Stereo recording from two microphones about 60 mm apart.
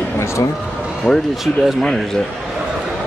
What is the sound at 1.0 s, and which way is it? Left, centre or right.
Speech, right.